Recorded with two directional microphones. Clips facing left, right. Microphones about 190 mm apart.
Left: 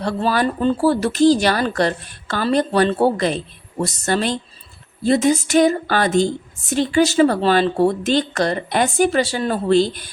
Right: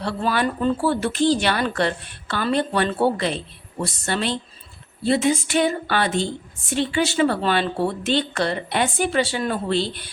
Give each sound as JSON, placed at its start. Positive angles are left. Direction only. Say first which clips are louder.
{"t": 0.0, "sound": "a woman's voice", "louder": "left 3 dB", "side_deg": 40}